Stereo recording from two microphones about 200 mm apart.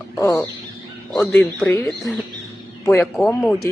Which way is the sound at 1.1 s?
5° left (ahead or behind).